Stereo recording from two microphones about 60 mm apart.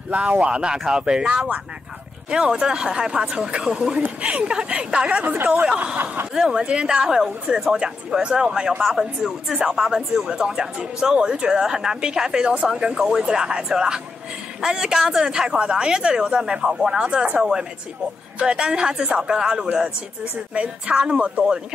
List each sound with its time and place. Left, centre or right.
0.1 s speech: right
4.0 s speech: right
5.2 s speech: right
6.3 s speech: centre